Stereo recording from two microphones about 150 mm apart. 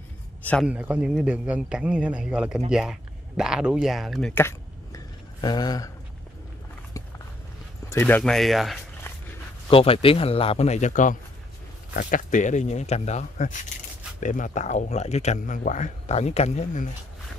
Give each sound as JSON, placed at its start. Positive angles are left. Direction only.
{"t": 0.7, "sound": "a man's voice", "side_deg": -10}
{"t": 4.3, "sound": "a sound", "side_deg": 15}
{"t": 5.4, "sound": "speech", "side_deg": 25}
{"t": 7.9, "sound": "speech", "side_deg": 15}
{"t": 8.2, "sound": "speech", "side_deg": 0}
{"t": 9.7, "sound": "a man's voice", "side_deg": 40}